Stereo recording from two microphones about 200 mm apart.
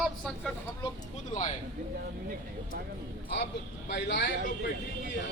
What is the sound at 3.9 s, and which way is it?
Speech, 65° left (ahead or behind).